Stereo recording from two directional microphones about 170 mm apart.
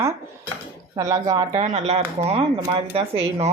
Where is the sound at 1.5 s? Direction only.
40° right (ahead or behind).